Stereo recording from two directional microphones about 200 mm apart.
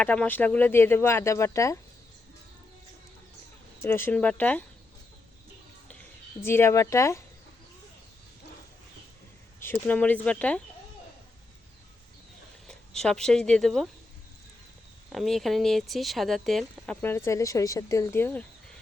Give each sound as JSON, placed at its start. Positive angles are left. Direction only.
{"t": 0.0, "sound": "speech", "side_deg": 5}
{"t": 3.8, "sound": "speech", "side_deg": 10}
{"t": 6.4, "sound": "speech", "side_deg": 10}
{"t": 9.6, "sound": "speech", "side_deg": 10}
{"t": 12.6, "sound": "speech", "side_deg": 5}
{"t": 15.1, "sound": "speech", "side_deg": 0}